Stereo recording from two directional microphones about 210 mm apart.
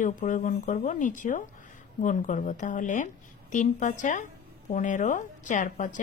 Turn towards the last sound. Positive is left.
turn(degrees=35)  # may be behind; listen again after turning